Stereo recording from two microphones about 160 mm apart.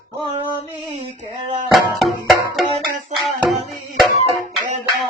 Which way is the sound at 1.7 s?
Centre (ahead or behind).